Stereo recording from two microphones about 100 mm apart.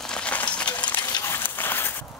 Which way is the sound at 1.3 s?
20° left (ahead or behind).